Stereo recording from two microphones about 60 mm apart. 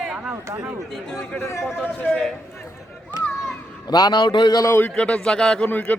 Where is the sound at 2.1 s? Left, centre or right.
Centre.